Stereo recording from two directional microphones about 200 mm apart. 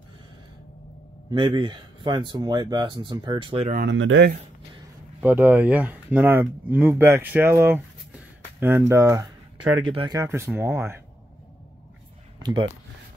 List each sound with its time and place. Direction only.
1.3 s speech: 25° right (ahead or behind)
3.7 s speech: 65° right (ahead or behind)
5.2 s speech: 10° right (ahead or behind)